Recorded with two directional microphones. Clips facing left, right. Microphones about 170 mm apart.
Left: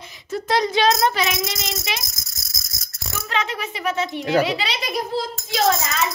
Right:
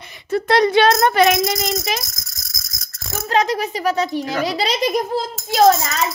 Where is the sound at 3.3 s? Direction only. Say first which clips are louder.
Right 8 dB; 40° right (ahead or behind).